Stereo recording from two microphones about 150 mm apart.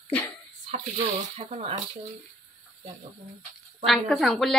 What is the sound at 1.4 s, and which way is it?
Speech, 45° right (ahead or behind).